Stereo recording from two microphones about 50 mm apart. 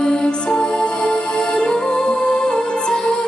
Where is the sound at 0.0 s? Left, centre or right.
Centre.